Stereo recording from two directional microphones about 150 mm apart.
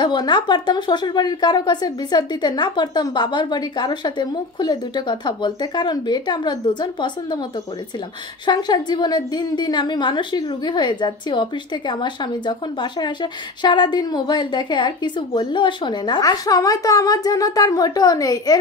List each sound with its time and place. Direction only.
0.0 s a woman's voice: 30° left (ahead or behind)
8.5 s a woman's voice: 30° left (ahead or behind)